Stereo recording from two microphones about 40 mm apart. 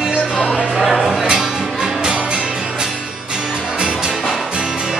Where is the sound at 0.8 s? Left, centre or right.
Centre.